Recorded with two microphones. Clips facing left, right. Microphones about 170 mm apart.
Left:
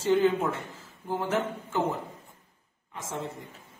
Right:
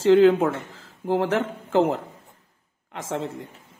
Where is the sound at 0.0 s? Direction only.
90° right.